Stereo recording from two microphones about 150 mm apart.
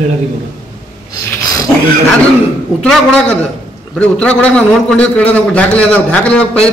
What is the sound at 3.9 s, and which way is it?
A man's voice, 5° left (ahead or behind).